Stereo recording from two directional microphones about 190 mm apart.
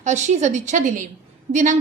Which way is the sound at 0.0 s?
40° right (ahead or behind).